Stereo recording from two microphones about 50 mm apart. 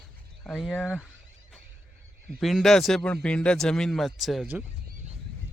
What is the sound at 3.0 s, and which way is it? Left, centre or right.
Speech, left.